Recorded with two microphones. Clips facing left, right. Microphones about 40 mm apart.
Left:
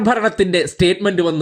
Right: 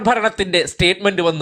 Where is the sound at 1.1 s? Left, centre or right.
Right.